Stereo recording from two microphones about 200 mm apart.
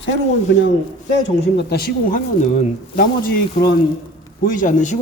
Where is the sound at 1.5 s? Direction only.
50° left (ahead or behind).